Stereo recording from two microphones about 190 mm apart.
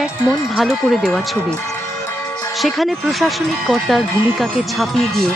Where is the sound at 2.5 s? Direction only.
Centre (ahead or behind).